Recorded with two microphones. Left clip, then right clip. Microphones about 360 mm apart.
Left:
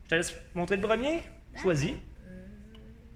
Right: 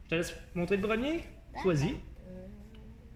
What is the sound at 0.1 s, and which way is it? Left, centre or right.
Speech, left.